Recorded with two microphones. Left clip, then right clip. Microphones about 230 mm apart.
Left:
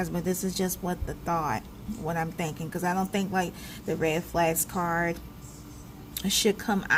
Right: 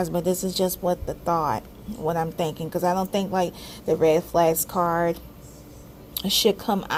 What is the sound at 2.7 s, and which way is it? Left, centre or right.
Speech, right.